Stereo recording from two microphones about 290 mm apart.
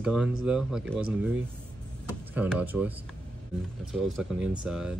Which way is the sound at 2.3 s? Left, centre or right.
Centre.